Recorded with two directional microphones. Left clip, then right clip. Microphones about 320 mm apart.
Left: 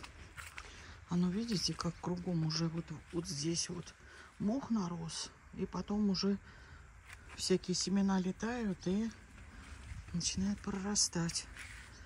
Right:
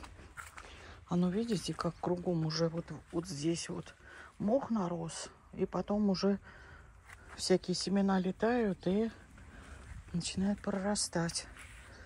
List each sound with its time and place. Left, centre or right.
0.0 s a sound: centre
2.3 s speech: centre
10.1 s speech: centre